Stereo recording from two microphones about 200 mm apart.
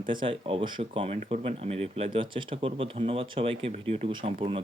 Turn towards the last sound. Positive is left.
turn(degrees=-30)  # may be behind; listen again after turning